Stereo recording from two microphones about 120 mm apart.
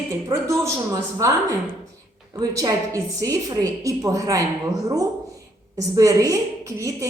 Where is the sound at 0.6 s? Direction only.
25° right (ahead or behind).